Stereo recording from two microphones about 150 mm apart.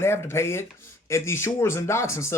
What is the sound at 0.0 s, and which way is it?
A man's voice, 15° left (ahead or behind).